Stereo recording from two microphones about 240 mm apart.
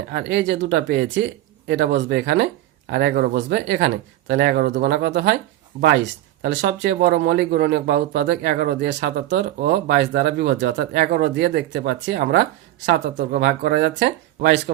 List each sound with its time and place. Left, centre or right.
0.1 s speech: right
6.4 s speech: right